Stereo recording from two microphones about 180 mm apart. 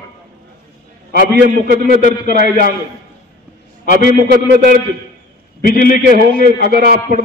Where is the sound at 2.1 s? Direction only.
50° left (ahead or behind).